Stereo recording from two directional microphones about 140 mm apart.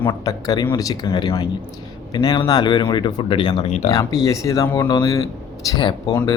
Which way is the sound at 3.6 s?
55° left (ahead or behind).